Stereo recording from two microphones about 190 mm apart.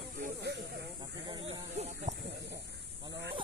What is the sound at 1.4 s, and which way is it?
Snake, 35° right (ahead or behind).